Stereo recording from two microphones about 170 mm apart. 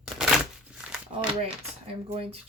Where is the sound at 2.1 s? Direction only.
35° right (ahead or behind).